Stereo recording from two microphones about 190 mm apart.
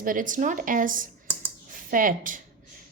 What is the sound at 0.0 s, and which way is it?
A woman's voice, 45° right (ahead or behind).